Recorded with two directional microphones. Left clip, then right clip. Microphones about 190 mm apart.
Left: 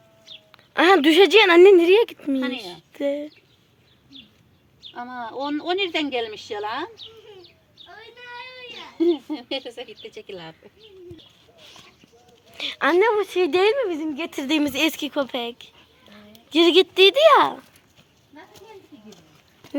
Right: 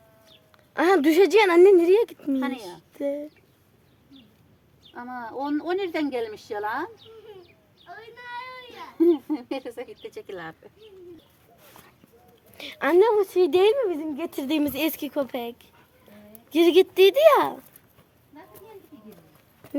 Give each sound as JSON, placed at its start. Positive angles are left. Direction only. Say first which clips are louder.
{"t": 0.5, "sound": "a woman's voice", "louder": "left 5 dB", "side_deg": 15}
{"t": 5.3, "sound": "a woman's voice", "louder": "left 1 dB", "side_deg": 10}
{"t": 5.5, "sound": "speech", "louder": "left 4 dB", "side_deg": -5}
{"t": 9.0, "sound": "speech", "louder": "right 1 dB", "side_deg": 0}
{"t": 12.5, "sound": "speech", "louder": "left 1 dB", "side_deg": 5}